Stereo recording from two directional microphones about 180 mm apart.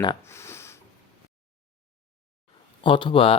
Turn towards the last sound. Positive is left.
turn(degrees=30)  # may be behind; listen again after turning